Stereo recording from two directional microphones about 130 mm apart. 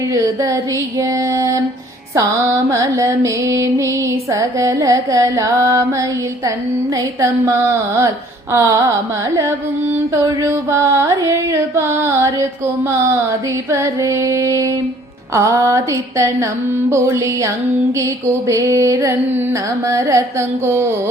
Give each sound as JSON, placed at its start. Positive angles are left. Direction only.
{"t": 0.1, "sound": "mantra", "side_deg": -25}
{"t": 13.7, "sound": "mantra", "side_deg": -20}